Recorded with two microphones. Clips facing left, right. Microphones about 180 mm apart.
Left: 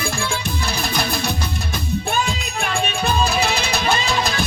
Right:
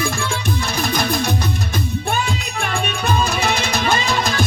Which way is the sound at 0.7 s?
45° right (ahead or behind).